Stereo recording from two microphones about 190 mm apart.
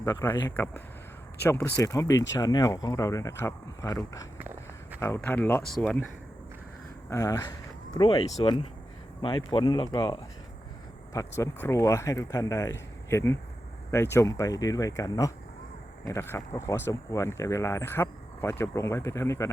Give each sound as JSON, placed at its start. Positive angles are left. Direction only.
{"t": 0.0, "sound": "speech", "side_deg": 15}
{"t": 4.4, "sound": "walk", "side_deg": -10}
{"t": 4.9, "sound": "speech", "side_deg": 15}
{"t": 7.1, "sound": "speech", "side_deg": 15}
{"t": 7.9, "sound": "speech", "side_deg": 25}